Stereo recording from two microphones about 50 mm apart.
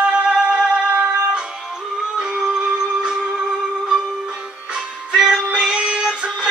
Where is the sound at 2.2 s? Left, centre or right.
Centre.